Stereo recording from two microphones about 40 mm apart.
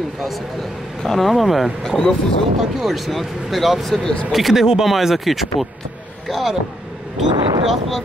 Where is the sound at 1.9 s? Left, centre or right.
Centre.